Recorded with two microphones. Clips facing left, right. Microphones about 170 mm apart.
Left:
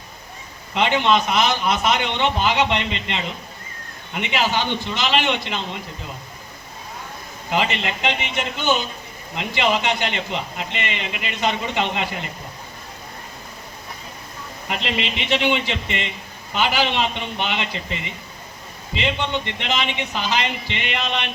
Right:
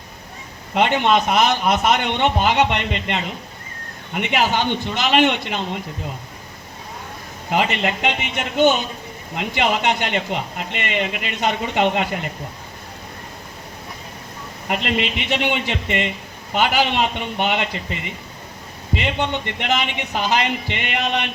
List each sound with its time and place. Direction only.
0.7 s speech: 50° right (ahead or behind)
7.5 s speech: 50° right (ahead or behind)
14.7 s speech: 50° right (ahead or behind)